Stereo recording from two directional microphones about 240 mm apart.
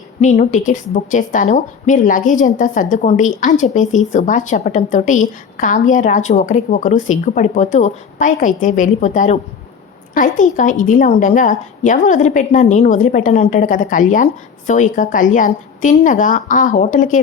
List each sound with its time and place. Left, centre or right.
0.2 s a woman's voice: left